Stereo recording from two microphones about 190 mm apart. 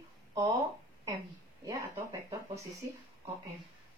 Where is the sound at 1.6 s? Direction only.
15° right (ahead or behind).